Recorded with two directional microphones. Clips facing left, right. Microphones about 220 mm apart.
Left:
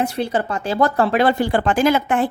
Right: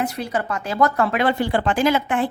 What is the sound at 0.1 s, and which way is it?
Speech, 30° left (ahead or behind).